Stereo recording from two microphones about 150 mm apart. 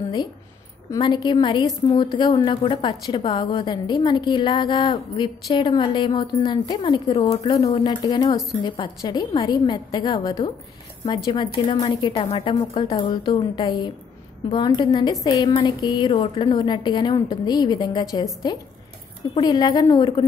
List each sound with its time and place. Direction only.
0.8 s a woman's voice: 25° left (ahead or behind)
8.0 s a woman's voice: 25° left (ahead or behind)
11.6 s a woman's voice: 30° left (ahead or behind)